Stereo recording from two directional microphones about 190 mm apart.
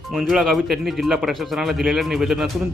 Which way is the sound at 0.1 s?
Centre (ahead or behind).